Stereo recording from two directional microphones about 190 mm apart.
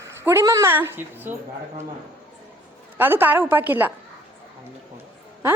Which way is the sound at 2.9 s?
10° right (ahead or behind).